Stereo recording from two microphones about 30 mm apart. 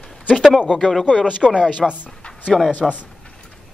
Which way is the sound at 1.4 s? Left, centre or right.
Centre.